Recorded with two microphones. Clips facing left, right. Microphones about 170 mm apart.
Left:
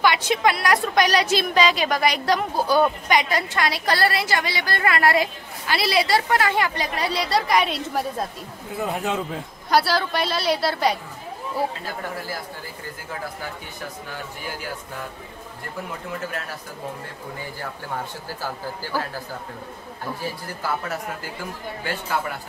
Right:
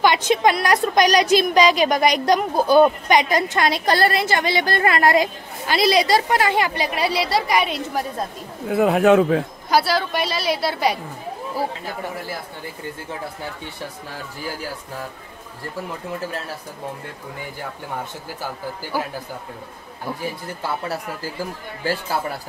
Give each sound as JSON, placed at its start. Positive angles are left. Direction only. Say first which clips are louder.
{"t": 0.0, "sound": "a woman's voice", "louder": "right 3 dB", "side_deg": -25}
{"t": 8.6, "sound": "speech", "louder": "right 11 dB", "side_deg": -70}
{"t": 9.7, "sound": "a woman's voice", "louder": "even", "side_deg": 0}
{"t": 20.8, "sound": "speech", "louder": "right 2 dB", "side_deg": -35}